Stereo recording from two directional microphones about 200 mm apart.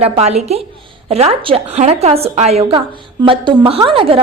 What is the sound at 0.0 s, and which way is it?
A woman's voice, 30° right (ahead or behind).